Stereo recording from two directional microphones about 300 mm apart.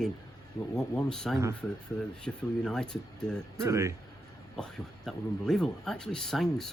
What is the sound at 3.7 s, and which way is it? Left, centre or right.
Speech, centre.